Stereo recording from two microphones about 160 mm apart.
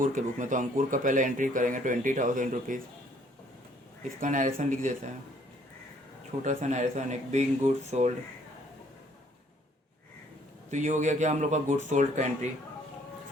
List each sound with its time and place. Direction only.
0.0 s speech: 55° right (ahead or behind)
4.2 s speech: 55° right (ahead or behind)
6.4 s speech: 50° right (ahead or behind)
10.7 s speech: 50° right (ahead or behind)